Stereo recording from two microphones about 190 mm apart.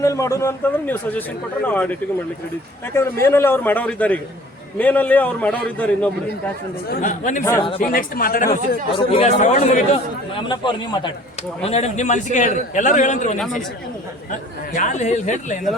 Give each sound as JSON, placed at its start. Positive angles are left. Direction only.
{"t": 0.0, "sound": "a man's voice", "side_deg": 15}
{"t": 6.9, "sound": "a man's voice", "side_deg": 45}
{"t": 8.4, "sound": "a man's voice", "side_deg": 30}
{"t": 13.4, "sound": "speech", "side_deg": 0}
{"t": 14.8, "sound": "a man's voice", "side_deg": 40}